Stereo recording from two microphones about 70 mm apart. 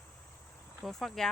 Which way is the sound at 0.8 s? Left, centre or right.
Centre.